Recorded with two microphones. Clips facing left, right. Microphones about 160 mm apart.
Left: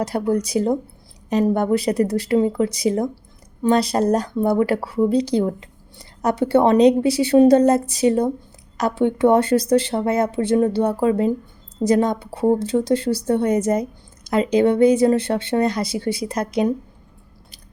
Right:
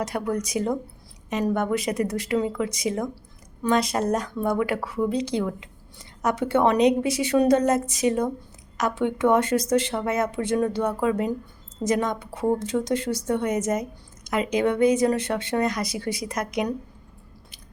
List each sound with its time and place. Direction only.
0.0 s speech: 30° left (ahead or behind)